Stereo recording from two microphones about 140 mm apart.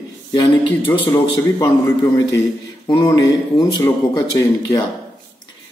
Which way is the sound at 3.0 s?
25° left (ahead or behind).